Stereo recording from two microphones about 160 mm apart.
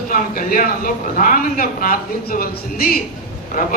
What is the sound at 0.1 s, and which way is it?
A man's voice, 60° left (ahead or behind).